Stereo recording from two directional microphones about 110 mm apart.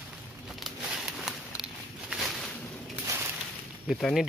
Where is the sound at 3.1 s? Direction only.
25° right (ahead or behind).